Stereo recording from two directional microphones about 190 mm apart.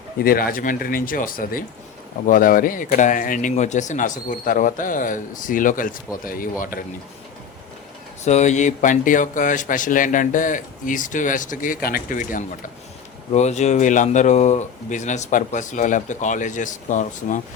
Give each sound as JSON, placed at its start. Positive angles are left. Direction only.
{"t": 0.2, "sound": "speech", "side_deg": 50}
{"t": 8.2, "sound": "speech", "side_deg": 35}